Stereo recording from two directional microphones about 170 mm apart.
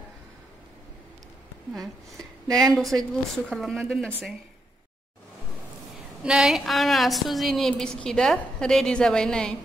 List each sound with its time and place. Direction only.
1.7 s a woman's voice: centre (ahead or behind)
2.4 s speech: 20° right (ahead or behind)
2.7 s a woman's voice: centre (ahead or behind)
6.2 s a woman's voice: 5° right (ahead or behind)